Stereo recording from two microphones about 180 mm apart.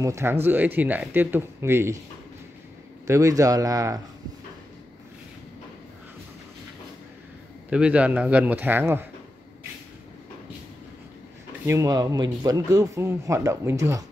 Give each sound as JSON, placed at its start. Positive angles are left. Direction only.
{"t": 0.0, "sound": "a man's voice", "side_deg": -15}
{"t": 3.1, "sound": "speech", "side_deg": -15}
{"t": 7.7, "sound": "a man's voice", "side_deg": -5}
{"t": 11.6, "sound": "a man's voice", "side_deg": -15}